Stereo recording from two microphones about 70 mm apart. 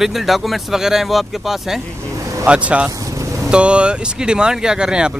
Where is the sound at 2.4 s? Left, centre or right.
Centre.